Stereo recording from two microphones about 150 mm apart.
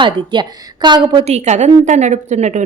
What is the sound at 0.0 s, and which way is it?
A woman's voice, 30° right (ahead or behind).